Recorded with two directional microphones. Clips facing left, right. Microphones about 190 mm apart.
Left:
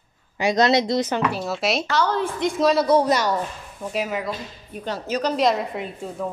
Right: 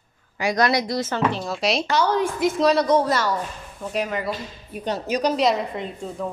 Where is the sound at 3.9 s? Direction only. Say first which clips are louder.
Even; 5° left (ahead or behind).